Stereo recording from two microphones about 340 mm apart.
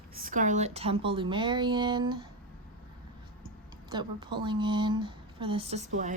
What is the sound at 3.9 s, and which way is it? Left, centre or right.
A woman's voice, centre.